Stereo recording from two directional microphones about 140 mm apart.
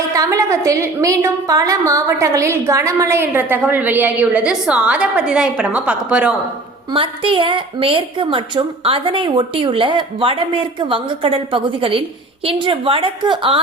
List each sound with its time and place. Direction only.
0.1 s a woman's voice: 25° right (ahead or behind)
6.9 s a woman's voice: 40° right (ahead or behind)